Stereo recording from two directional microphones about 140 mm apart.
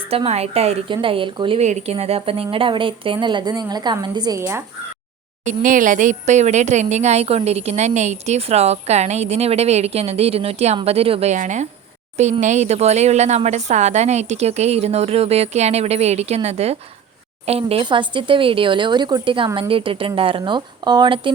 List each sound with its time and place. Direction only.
0.1 s speech: 45° right (ahead or behind)
1.6 s a woman's voice: 50° right (ahead or behind); by 4.6 s 20° right (ahead or behind)
5.5 s a woman's voice: 70° right (ahead or behind); by 21.3 s 35° right (ahead or behind)